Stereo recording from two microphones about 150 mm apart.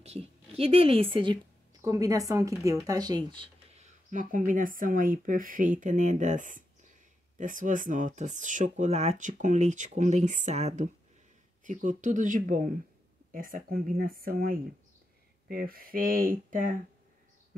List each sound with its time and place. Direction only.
0.0 s a woman's voice: 40° right (ahead or behind)
1.8 s a woman's voice: 25° right (ahead or behind)
3.7 s a sound: 55° right (ahead or behind)
4.5 s speech: 65° right (ahead or behind)
13.3 s speech: 75° right (ahead or behind)